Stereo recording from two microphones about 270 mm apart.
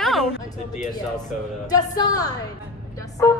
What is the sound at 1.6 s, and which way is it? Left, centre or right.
Speech, centre.